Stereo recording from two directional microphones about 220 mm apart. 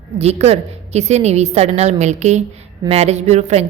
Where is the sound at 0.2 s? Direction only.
30° right (ahead or behind).